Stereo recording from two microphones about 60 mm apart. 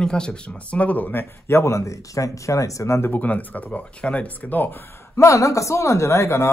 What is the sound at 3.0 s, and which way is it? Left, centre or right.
Speech, left.